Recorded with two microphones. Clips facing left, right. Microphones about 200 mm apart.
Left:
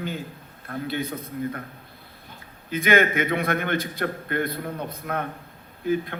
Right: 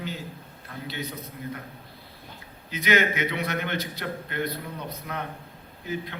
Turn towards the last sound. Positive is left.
turn(degrees=50)  # may be behind; listen again after turning